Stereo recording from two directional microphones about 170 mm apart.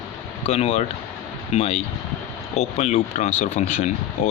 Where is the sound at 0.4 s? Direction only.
40° left (ahead or behind).